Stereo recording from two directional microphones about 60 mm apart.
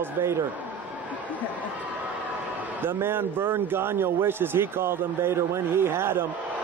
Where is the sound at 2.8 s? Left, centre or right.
Right.